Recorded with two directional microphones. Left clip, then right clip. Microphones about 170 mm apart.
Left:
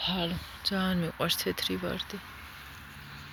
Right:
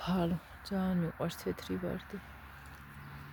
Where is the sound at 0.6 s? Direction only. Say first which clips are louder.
Left 7 dB; 10° right (ahead or behind).